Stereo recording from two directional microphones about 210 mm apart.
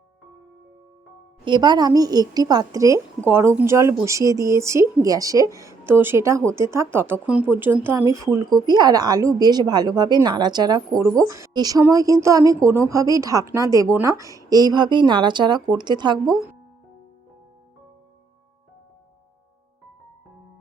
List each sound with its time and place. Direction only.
1.5 s a woman's voice: 20° right (ahead or behind)